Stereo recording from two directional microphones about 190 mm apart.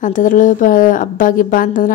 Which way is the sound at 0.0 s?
45° left (ahead or behind).